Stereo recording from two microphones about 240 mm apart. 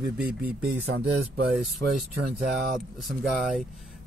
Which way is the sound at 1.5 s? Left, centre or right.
Centre.